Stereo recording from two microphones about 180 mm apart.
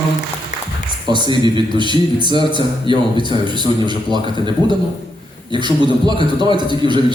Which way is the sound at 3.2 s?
25° right (ahead or behind).